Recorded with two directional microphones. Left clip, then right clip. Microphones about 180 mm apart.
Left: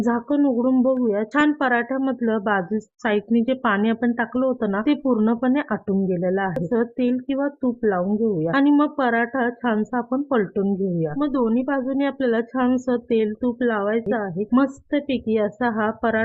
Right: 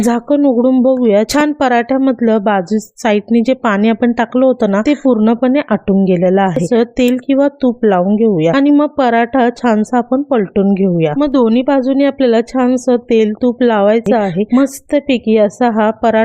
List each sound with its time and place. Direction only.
0.0 s speech: 35° right (ahead or behind)